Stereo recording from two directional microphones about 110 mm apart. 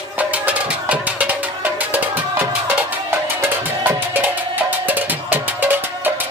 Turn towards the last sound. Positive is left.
turn(degrees=-15)  # may be behind; listen again after turning